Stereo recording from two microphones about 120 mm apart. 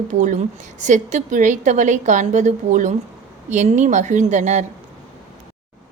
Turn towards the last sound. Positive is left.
turn(degrees=-80)